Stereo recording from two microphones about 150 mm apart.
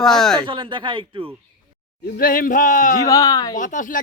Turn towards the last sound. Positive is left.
turn(degrees=60)  # may be behind; listen again after turning